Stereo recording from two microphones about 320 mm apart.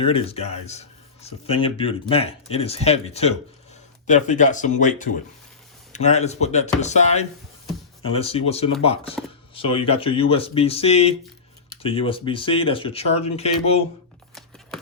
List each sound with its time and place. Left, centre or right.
0.0 s speech: centre